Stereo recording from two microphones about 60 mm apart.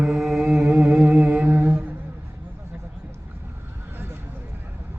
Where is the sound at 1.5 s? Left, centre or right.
Right.